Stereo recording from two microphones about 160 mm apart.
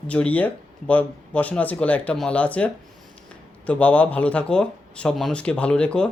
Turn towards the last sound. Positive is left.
turn(degrees=5)  # may be behind; listen again after turning